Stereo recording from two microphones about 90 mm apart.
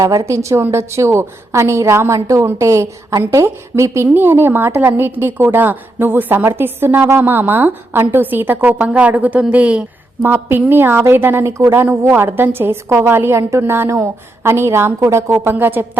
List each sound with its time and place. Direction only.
0.0 s a woman's voice: 35° right (ahead or behind)